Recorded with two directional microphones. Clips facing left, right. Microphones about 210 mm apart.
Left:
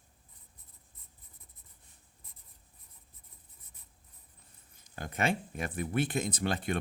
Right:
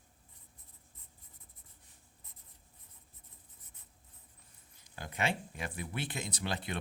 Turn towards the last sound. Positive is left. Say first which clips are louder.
# left 6 dB
turn(degrees=50)  # may be behind; listen again after turning